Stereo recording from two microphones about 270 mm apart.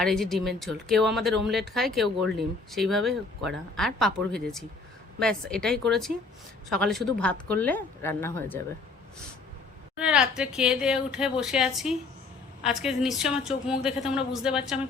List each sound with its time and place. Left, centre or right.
0.0 s speech: centre
10.0 s speech: centre